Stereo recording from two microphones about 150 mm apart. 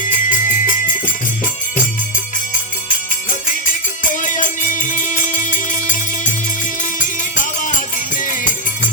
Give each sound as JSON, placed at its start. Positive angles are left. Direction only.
{"t": 0.1, "sound": "music", "side_deg": 60}
{"t": 3.7, "sound": "music", "side_deg": 60}